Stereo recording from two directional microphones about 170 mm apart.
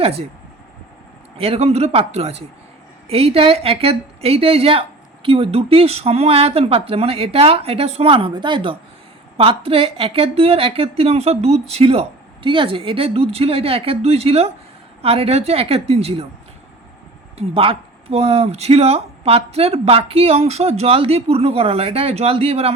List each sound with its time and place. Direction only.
0.0 s a woman's voice: 35° right (ahead or behind)
1.4 s a woman's voice: 35° right (ahead or behind)
17.3 s a woman's voice: 35° right (ahead or behind)